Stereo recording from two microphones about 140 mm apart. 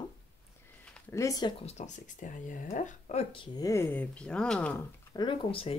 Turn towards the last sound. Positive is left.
turn(degrees=40)  # may be behind; listen again after turning